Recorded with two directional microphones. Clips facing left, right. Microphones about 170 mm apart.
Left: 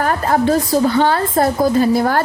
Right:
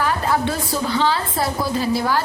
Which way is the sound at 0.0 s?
50° left (ahead or behind).